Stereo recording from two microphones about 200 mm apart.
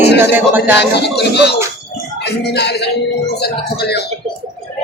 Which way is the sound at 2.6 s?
55° left (ahead or behind).